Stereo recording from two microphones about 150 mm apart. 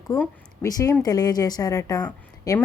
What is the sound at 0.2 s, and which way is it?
A woman's voice, 20° left (ahead or behind).